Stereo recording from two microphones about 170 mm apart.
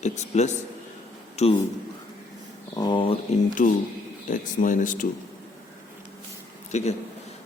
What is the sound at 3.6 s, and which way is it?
Speech, 50° left (ahead or behind).